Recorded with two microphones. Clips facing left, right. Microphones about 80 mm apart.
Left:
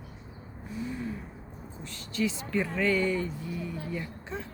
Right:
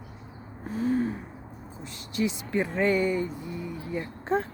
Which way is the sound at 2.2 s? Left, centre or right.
Centre.